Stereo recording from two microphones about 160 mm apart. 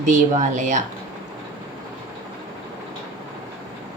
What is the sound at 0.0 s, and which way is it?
Speech, 50° right (ahead or behind).